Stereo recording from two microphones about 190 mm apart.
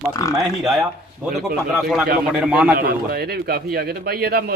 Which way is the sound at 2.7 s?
55° right (ahead or behind).